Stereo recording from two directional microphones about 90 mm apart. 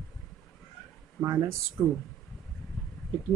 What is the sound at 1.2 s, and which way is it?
Speech, 35° right (ahead or behind).